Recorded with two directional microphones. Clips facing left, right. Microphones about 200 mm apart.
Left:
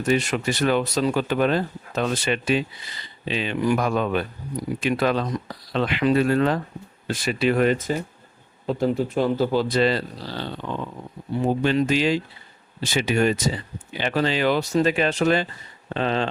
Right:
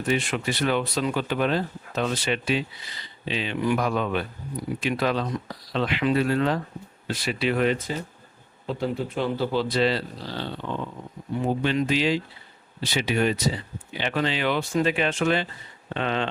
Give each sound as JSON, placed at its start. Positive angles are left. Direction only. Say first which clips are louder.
{"t": 0.0, "sound": "speech", "louder": "left 3 dB", "side_deg": 40}
{"t": 11.4, "sound": "speech", "louder": "left 3 dB", "side_deg": 45}